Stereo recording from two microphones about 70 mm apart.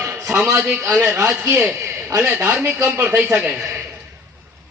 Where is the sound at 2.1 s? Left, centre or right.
Right.